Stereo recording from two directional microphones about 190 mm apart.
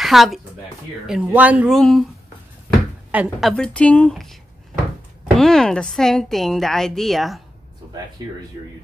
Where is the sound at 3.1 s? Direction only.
5° right (ahead or behind).